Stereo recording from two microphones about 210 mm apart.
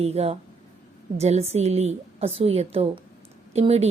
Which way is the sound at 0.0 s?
30° right (ahead or behind).